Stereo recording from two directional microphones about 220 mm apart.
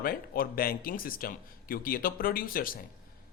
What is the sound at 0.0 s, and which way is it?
A man's voice, 40° left (ahead or behind).